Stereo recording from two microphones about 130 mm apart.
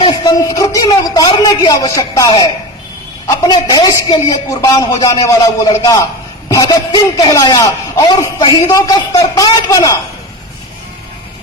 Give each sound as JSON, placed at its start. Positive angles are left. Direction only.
{"t": 0.0, "sound": "a man's voice", "side_deg": 30}